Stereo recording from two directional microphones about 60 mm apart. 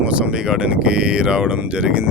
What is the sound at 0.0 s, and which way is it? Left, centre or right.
Speech, centre.